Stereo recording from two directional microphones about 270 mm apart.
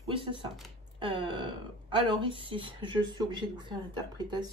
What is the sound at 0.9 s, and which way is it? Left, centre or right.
Speech, centre.